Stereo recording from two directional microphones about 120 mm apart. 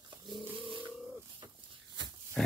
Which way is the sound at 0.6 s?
45° right (ahead or behind).